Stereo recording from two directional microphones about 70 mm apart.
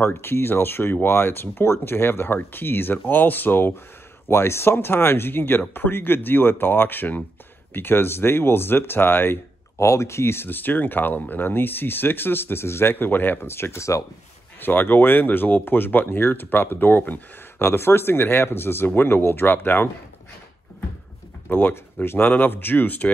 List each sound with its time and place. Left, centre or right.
0.0 s speech: left
14.6 s speech: left
21.5 s speech: left